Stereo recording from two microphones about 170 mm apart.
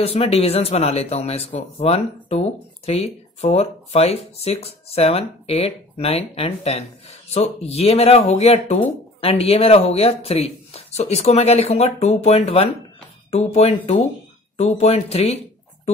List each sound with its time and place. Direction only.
0.0 s speech: 35° left (ahead or behind)